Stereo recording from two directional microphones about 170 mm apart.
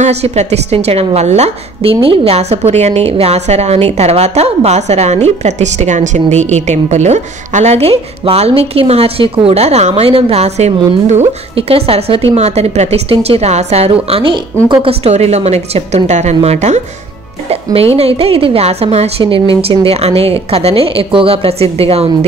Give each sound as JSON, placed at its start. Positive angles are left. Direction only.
{"t": 0.0, "sound": "a woman's voice", "side_deg": -40}
{"t": 17.9, "sound": "a woman's voice", "side_deg": -35}